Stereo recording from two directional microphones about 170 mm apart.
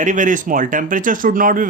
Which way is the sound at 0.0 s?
50° right (ahead or behind).